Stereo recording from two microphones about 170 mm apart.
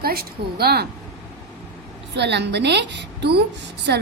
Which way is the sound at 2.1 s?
85° right.